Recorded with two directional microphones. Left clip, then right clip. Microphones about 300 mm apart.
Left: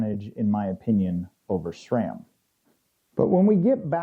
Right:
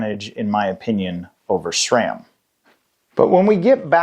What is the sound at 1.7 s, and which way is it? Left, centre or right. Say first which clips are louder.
Speech: right 11 dB; centre.